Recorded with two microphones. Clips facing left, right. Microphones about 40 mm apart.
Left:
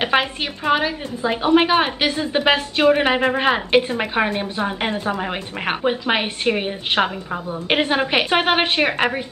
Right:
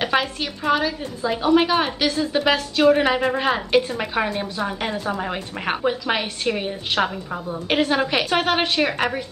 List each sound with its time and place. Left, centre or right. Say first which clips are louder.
0.0 s a woman's voice: left 2 dB; left